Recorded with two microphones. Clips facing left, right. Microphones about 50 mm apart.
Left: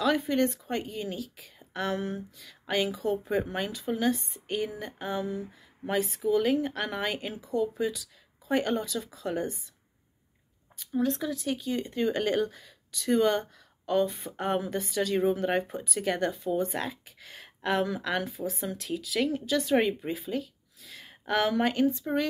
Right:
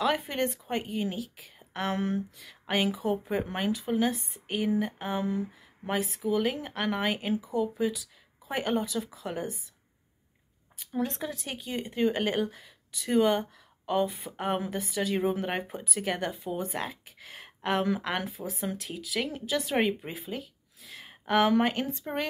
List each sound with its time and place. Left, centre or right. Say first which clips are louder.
0.0 s speech: left 2 dB; right
6.3 s speech: left 3 dB; centre
10.8 s speech: left 3 dB; right; by 20.2 s centre
20.8 s a sound: even; right
21.5 s speech: even; right